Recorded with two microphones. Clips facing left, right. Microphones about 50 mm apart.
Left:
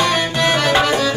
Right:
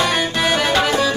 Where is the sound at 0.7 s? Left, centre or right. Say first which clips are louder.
Left 2 dB; centre.